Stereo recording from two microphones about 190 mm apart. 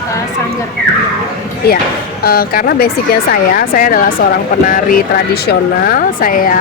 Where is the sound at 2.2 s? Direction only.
50° left (ahead or behind).